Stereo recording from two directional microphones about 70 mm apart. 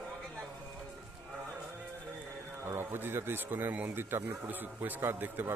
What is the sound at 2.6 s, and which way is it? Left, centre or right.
Speech, right.